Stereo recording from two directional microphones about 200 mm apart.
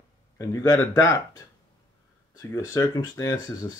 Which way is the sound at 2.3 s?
15° left (ahead or behind).